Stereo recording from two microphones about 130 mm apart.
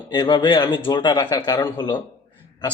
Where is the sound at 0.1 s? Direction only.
35° left (ahead or behind).